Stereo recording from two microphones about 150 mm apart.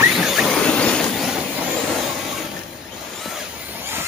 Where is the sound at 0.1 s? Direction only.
Centre (ahead or behind).